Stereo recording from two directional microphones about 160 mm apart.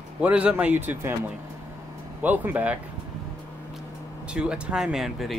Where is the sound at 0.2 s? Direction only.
5° right (ahead or behind).